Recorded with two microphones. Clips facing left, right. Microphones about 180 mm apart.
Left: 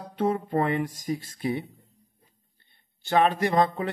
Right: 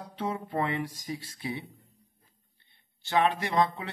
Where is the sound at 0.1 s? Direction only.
50° left (ahead or behind).